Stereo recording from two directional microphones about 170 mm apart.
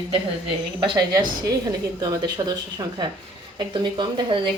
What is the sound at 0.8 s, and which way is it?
Speech, 25° right (ahead or behind).